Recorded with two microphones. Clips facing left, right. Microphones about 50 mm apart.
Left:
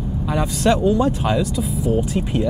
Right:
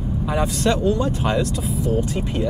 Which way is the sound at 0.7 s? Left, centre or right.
Centre.